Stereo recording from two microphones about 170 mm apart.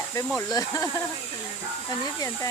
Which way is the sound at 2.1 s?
20° left (ahead or behind).